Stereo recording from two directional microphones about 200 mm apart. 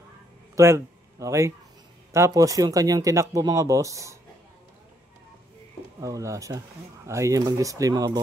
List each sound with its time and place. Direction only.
0.6 s speech: 15° right (ahead or behind)
5.9 s speech: 15° right (ahead or behind)